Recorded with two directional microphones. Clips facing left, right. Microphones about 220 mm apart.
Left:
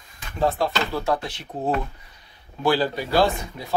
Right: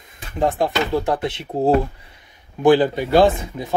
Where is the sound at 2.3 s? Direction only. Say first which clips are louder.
Right 8 dB; 20° right (ahead or behind).